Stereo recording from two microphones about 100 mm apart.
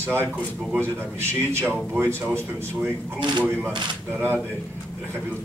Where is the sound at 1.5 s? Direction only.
20° right (ahead or behind).